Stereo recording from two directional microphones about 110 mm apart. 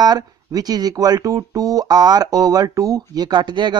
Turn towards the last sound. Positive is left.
turn(degrees=-45)  # may be behind; listen again after turning